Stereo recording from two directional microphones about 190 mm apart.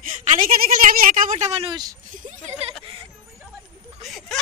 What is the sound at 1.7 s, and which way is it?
Speech, 20° right (ahead or behind).